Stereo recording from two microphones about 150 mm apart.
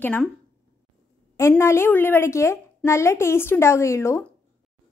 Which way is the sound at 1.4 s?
20° left (ahead or behind).